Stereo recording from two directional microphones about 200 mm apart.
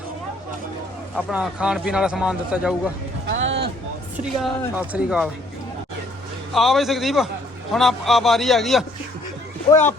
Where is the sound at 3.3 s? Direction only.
60° right (ahead or behind).